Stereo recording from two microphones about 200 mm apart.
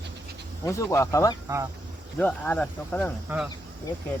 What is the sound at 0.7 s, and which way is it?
Speech, 15° left (ahead or behind).